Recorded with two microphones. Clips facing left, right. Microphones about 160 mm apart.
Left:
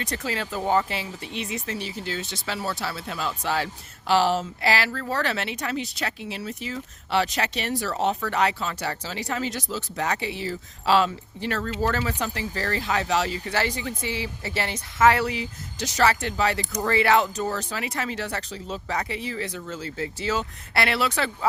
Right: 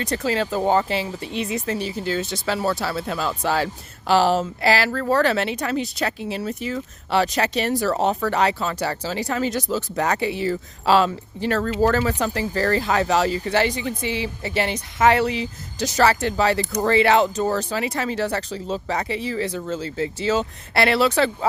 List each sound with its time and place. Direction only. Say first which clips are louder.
0.0 s speech: right 7 dB; 30° right (ahead or behind); by 10.9 s 55° right (ahead or behind)
10.9 s speech: right 3 dB; 40° right (ahead or behind)
13.5 s speech: right 6 dB; 20° right (ahead or behind)
15.8 s speech: right 4 dB; 35° right (ahead or behind)